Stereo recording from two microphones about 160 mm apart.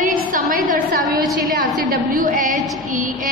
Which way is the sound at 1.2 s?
Centre (ahead or behind).